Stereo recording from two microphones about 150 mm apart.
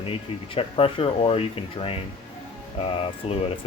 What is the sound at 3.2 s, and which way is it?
Speech, 40° left (ahead or behind).